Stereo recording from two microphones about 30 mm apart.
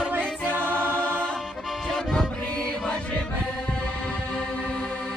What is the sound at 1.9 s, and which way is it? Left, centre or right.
Music, left.